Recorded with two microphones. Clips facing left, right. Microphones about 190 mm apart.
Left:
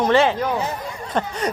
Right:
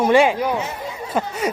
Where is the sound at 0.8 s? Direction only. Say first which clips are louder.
Right 1 dB; 10° right (ahead or behind).